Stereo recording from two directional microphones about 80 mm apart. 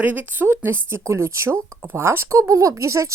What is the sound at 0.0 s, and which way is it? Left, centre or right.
A woman's voice, right.